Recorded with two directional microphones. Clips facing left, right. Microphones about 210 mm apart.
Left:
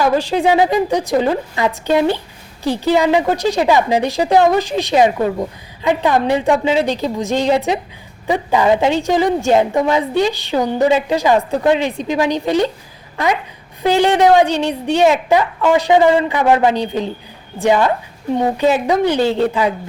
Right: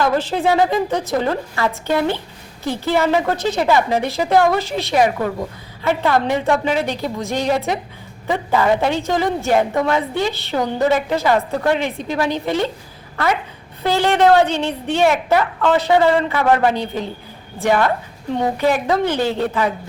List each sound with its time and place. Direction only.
0.0 s a woman's voice: 15° left (ahead or behind)
13.8 s a woman's voice: 15° left (ahead or behind)